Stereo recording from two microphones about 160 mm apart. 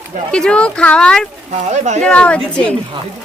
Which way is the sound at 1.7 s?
45° right (ahead or behind).